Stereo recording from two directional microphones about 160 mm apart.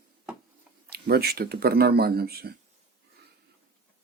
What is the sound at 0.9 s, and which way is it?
Speech, 75° right (ahead or behind).